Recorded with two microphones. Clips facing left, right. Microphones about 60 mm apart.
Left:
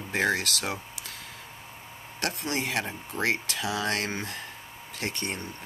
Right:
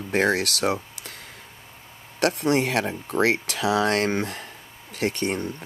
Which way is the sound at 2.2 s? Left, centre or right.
Right.